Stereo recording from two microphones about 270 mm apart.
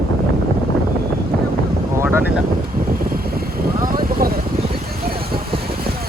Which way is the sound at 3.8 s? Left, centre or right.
Right.